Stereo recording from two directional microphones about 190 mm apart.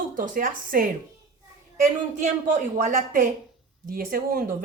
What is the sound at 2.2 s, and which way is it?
A woman's voice, 40° right (ahead or behind).